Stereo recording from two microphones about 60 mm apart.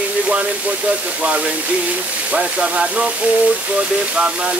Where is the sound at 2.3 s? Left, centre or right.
Right.